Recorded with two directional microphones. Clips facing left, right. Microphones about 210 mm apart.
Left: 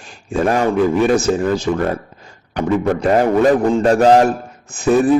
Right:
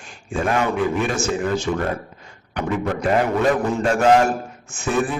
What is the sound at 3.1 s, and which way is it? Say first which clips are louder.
Speech: left 6 dB; 40° left (ahead or behind).